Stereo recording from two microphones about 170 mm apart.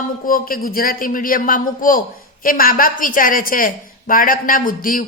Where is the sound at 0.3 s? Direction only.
55° left (ahead or behind).